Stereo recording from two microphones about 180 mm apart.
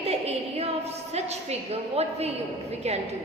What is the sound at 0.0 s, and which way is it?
A woman's voice, 35° right (ahead or behind).